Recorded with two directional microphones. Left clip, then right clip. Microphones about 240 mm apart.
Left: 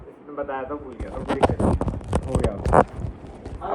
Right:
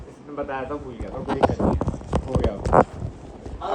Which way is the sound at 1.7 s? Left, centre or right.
Left.